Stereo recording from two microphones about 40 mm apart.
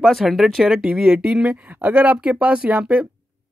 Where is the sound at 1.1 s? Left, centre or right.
Centre.